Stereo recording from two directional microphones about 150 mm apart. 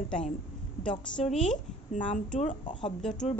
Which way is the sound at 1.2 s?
Centre (ahead or behind).